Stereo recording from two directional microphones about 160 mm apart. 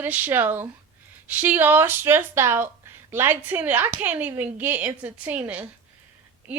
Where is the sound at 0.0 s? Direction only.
10° right (ahead or behind).